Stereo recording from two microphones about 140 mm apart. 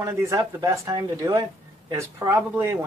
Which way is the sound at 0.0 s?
20° right (ahead or behind).